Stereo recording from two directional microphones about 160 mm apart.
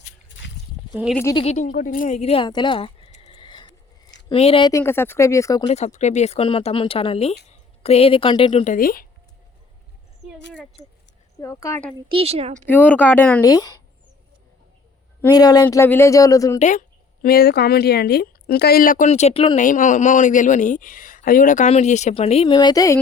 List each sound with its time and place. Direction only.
1.1 s speech: 15° left (ahead or behind)
1.4 s speech: 45° left (ahead or behind)
4.7 s speech: 15° left (ahead or behind)
5.6 s a woman's voice: 45° left (ahead or behind)
8.6 s speech: 60° left (ahead or behind)
11.3 s speech: 20° left (ahead or behind)
11.9 s a woman's voice: 30° right (ahead or behind)
12.5 s speech: 10° left (ahead or behind)
13.4 s speech: 20° left (ahead or behind)
15.2 s speech: 25° left (ahead or behind)
16.6 s speech: 50° left (ahead or behind)
17.2 s speech: 70° left (ahead or behind); by 19.5 s 35° left (ahead or behind)
19.5 s speech: 55° left (ahead or behind)
22.5 s speech: 25° left (ahead or behind)